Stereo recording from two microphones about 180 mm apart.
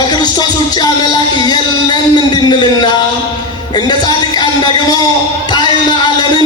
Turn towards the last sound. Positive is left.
turn(degrees=25)  # may be behind; listen again after turning